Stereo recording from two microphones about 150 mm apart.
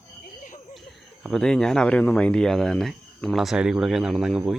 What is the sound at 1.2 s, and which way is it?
Speech, 5° left (ahead or behind).